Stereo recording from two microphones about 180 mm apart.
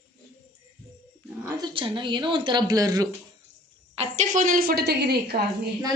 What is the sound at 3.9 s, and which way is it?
A woman's voice, 40° right (ahead or behind).